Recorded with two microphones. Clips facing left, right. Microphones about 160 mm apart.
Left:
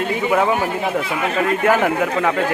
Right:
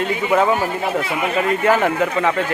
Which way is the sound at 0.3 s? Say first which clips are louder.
Right 1 dB; centre (ahead or behind).